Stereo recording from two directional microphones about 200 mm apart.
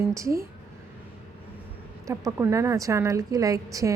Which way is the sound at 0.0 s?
15° right (ahead or behind).